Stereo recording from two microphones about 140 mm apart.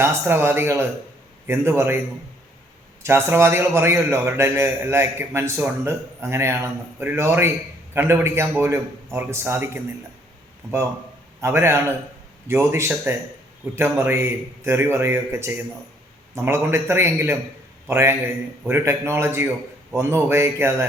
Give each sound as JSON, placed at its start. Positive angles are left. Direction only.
{"t": 0.0, "sound": "a man's voice", "side_deg": -20}
{"t": 3.0, "sound": "a man's voice", "side_deg": -20}
{"t": 11.3, "sound": "a man's voice", "side_deg": -20}